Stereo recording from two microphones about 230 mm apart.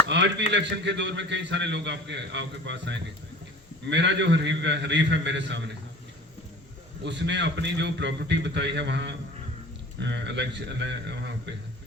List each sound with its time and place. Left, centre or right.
0.1 s a man's voice: right
7.0 s a man's voice: right